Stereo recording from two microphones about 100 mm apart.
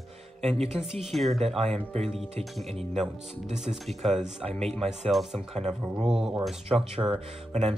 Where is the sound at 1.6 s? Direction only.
90° right.